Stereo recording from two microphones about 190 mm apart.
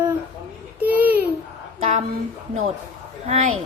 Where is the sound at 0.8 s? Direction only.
10° right (ahead or behind).